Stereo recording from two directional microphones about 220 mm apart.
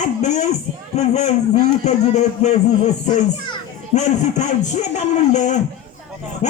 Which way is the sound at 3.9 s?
30° left (ahead or behind).